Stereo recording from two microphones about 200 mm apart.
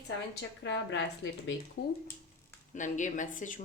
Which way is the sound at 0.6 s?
65° left (ahead or behind).